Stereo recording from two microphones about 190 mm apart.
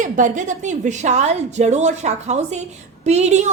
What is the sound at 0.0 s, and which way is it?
A woman's voice, 40° right (ahead or behind).